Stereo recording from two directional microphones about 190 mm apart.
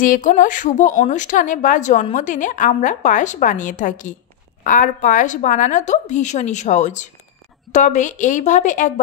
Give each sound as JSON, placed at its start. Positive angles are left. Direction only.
{"t": 0.0, "sound": "a woman's voice", "side_deg": 45}